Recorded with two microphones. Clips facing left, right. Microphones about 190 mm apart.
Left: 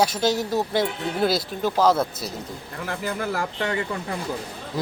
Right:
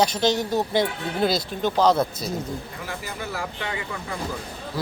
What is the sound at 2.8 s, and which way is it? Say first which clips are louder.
Speech: left 5 dB; 50° left (ahead or behind).